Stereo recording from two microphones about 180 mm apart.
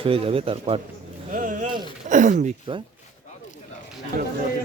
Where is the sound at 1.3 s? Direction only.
45° right (ahead or behind).